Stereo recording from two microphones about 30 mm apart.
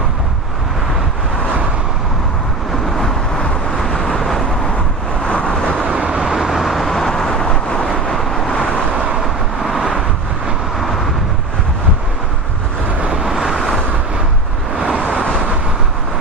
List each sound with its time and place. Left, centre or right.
3.8 s vehicle: centre
5.2 s vehicle: left
6.2 s vehicle: centre; by 7.9 s left
9.2 s vehicle: centre
13.1 s vehicle: right
13.3 s vehicle: centre